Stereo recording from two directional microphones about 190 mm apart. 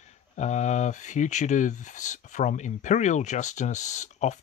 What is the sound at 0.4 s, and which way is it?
Speech, 35° left (ahead or behind).